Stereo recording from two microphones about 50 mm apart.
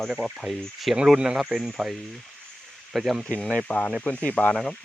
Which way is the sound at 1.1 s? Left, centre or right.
Centre.